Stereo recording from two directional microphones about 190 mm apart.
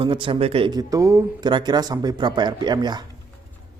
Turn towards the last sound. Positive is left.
turn(degrees=-20)  # may be behind; listen again after turning